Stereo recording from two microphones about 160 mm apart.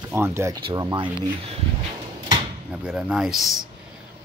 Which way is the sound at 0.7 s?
25° right (ahead or behind).